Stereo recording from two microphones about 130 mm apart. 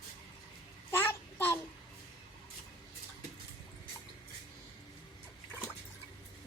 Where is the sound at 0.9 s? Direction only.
15° left (ahead or behind).